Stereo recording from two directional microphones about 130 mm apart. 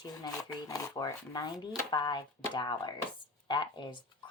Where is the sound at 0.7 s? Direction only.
30° left (ahead or behind).